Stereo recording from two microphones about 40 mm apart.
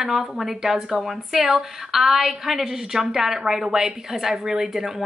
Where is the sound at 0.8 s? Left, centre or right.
Centre.